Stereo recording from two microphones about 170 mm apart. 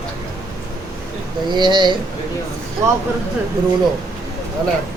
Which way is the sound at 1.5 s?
25° right (ahead or behind).